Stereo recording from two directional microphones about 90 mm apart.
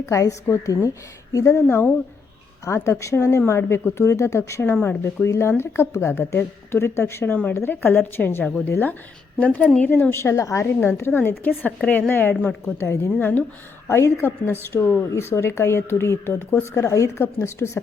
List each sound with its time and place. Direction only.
0.0 s a woman's voice: 35° left (ahead or behind)
10.8 s speech: 25° left (ahead or behind)
16.7 s speech: 35° left (ahead or behind)